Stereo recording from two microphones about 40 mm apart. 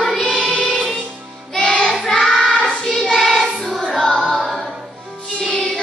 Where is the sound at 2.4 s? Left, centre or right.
Centre.